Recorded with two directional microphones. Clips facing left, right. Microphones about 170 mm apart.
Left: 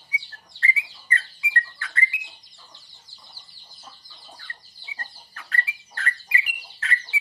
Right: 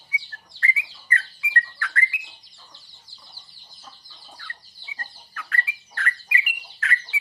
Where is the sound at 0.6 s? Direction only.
25° left (ahead or behind).